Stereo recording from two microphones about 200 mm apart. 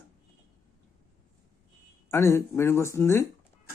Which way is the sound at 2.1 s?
15° left (ahead or behind).